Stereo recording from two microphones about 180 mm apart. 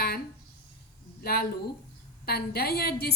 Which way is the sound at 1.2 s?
60° left (ahead or behind).